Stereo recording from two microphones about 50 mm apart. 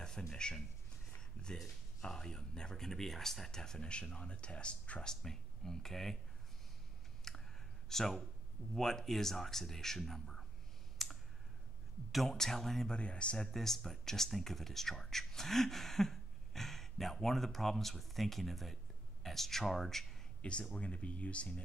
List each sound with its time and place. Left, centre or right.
0.4 s speech: centre
5.1 s speech: centre
7.3 s a sound: centre
7.9 s speech: centre
11.0 s clicking: centre
12.1 s speech: centre
12.9 s speech: left
13.5 s speech: centre
20.4 s speech: left